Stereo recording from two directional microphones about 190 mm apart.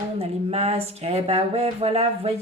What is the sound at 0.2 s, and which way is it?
A woman's voice, 35° right (ahead or behind).